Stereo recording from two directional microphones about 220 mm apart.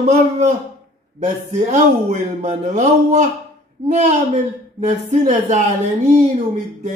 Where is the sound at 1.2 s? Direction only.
30° right (ahead or behind).